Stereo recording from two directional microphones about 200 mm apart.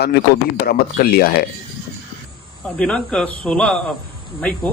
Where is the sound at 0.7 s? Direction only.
50° left (ahead or behind).